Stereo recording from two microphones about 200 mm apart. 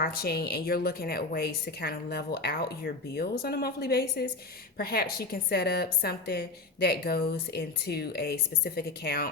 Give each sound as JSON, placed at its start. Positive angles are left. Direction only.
{"t": 0.0, "sound": "a woman's voice", "side_deg": 50}